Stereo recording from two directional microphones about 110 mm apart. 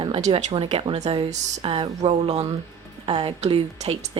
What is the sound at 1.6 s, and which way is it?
Speech, 55° right (ahead or behind).